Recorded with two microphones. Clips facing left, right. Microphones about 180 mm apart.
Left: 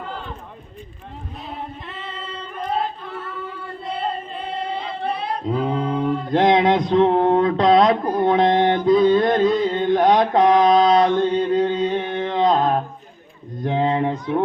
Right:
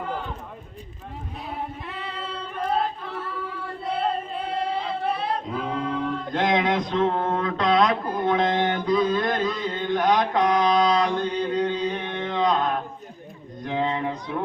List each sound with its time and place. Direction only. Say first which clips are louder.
1.5 s singing: even; 5° right (ahead or behind)
5.6 s music: left 5 dB; 35° left (ahead or behind)
6.9 s speech: left 10 dB; 35° left (ahead or behind)
7.3 s a sound: left 4 dB; 25° left (ahead or behind)
8.3 s mantra: left 5 dB; 25° left (ahead or behind)
13.7 s a sound: left 6 dB; 35° left (ahead or behind)